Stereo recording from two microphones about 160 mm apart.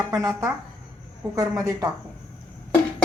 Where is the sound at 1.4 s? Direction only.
20° right (ahead or behind).